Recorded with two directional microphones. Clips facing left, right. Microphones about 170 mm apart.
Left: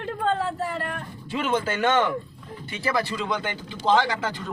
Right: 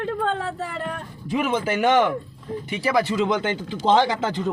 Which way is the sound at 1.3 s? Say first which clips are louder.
Right 3 dB; 10° right (ahead or behind).